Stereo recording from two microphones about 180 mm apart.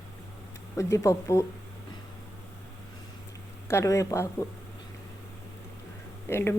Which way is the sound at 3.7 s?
15° left (ahead or behind).